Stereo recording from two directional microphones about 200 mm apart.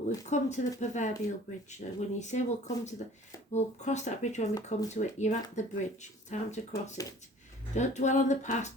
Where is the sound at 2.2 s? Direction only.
35° left (ahead or behind).